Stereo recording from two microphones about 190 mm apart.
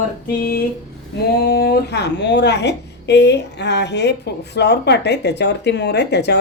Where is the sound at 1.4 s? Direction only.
55° left (ahead or behind).